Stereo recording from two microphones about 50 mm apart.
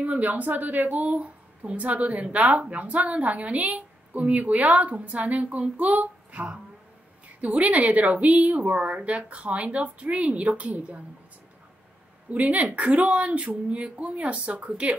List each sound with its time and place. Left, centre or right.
0.0 s a woman's voice: right
12.3 s a woman's voice: right